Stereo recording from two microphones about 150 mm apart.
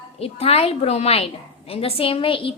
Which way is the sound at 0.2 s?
45° left (ahead or behind).